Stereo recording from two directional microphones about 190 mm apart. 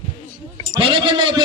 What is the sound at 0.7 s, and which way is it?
Speech, 25° right (ahead or behind).